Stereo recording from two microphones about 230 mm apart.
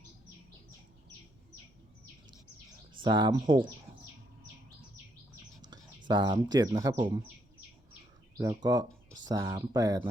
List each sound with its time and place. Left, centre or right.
3.0 s speech: centre
6.1 s speech: centre
8.4 s speech: centre